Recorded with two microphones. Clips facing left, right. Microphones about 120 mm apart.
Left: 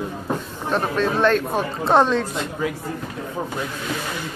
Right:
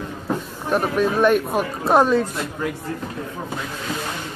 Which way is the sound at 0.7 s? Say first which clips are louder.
Right 2 dB; 10° right (ahead or behind).